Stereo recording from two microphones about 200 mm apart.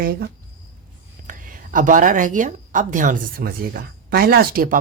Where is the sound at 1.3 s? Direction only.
40° right (ahead or behind).